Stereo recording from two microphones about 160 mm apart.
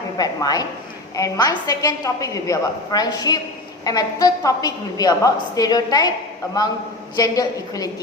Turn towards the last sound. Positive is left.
turn(degrees=25)  # may be behind; listen again after turning